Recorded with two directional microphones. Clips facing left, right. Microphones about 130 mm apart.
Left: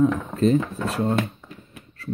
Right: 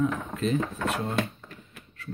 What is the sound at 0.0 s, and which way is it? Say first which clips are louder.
Speech: left 8 dB; 35° left (ahead or behind).